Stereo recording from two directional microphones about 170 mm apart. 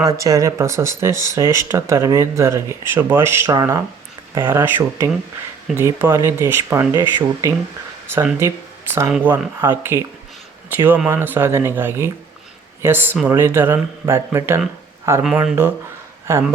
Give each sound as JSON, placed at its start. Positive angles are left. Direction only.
{"t": 0.0, "sound": "speech", "side_deg": -20}
{"t": 8.0, "sound": "speech", "side_deg": -10}
{"t": 15.2, "sound": "speech", "side_deg": -5}
{"t": 16.3, "sound": "speech", "side_deg": -20}